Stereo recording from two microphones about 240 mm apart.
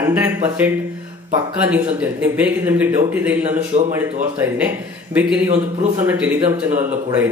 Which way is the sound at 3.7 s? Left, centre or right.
Right.